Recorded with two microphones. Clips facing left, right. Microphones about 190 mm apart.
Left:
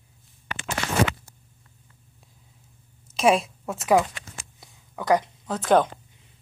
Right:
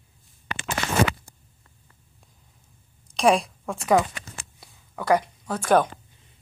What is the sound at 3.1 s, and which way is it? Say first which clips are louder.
Speech: even; 5° left (ahead or behind).